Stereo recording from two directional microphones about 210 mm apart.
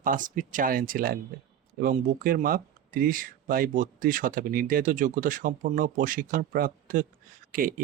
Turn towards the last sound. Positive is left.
turn(degrees=-40)  # may be behind; listen again after turning